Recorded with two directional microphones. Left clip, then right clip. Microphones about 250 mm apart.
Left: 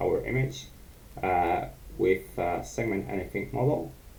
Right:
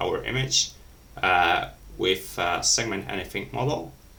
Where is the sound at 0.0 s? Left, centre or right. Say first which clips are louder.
Right 1 dB; centre.